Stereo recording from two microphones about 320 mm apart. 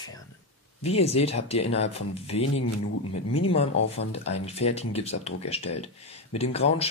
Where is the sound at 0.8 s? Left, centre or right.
Centre.